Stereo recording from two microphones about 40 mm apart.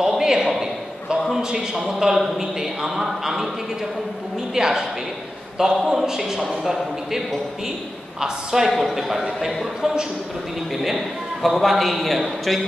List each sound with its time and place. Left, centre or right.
0.0 s a sound: centre
1.4 s a man's voice: centre
4.6 s a man's voice: centre
8.2 s a man's voice: centre
11.4 s a man's voice: centre